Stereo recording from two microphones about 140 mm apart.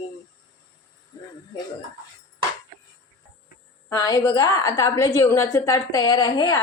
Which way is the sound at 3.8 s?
25° left (ahead or behind).